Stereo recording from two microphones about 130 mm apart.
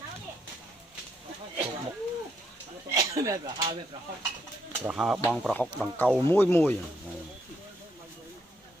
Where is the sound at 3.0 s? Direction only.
25° right (ahead or behind).